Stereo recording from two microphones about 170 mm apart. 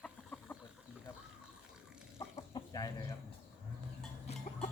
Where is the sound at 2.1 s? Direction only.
35° left (ahead or behind).